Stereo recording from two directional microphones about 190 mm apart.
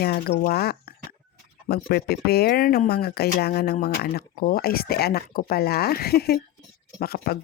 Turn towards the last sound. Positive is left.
turn(degrees=55)  # may be behind; listen again after turning